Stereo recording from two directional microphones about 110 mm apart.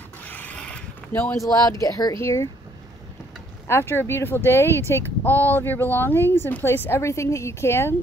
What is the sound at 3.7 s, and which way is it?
Speech, 20° left (ahead or behind).